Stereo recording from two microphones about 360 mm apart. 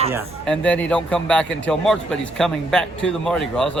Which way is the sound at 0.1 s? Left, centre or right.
Centre.